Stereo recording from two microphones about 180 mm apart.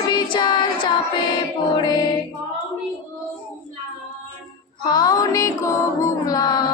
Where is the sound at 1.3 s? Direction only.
25° left (ahead or behind).